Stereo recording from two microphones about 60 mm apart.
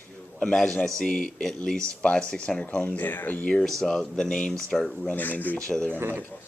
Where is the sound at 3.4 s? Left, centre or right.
Centre.